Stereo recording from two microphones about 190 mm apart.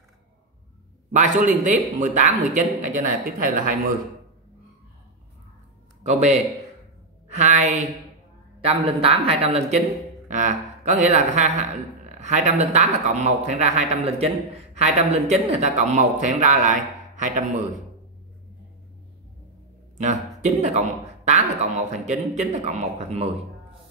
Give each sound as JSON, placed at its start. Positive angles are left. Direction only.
{"t": 1.1, "sound": "speech", "side_deg": -40}
{"t": 6.0, "sound": "a woman's voice", "side_deg": -40}
{"t": 20.0, "sound": "speech", "side_deg": -40}